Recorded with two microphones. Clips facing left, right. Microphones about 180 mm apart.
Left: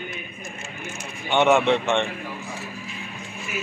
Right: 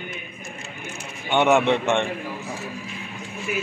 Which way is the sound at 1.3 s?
15° right (ahead or behind).